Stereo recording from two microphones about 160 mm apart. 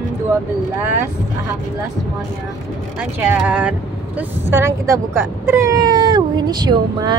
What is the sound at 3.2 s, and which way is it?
A woman's voice, 10° right (ahead or behind).